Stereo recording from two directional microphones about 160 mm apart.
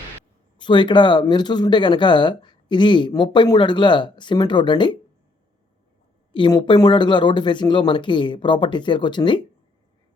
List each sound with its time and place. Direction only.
0.6 s speech: 30° left (ahead or behind)
6.3 s speech: 30° left (ahead or behind)